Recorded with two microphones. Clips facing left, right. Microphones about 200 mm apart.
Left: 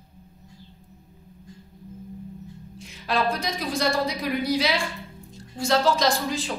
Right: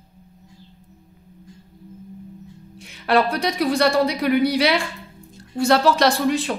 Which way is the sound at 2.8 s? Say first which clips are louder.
Right 6 dB; 65° right (ahead or behind).